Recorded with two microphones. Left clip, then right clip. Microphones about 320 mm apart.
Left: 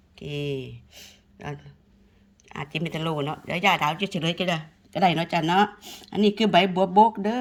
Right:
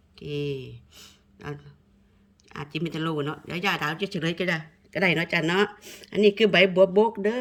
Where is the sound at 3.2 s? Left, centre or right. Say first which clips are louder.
Left 5 dB; centre.